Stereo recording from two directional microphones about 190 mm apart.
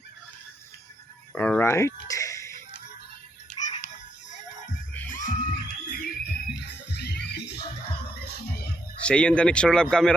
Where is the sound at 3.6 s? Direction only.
40° left (ahead or behind).